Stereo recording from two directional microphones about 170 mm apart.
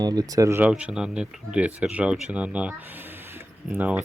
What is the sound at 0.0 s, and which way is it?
Speech, 20° right (ahead or behind).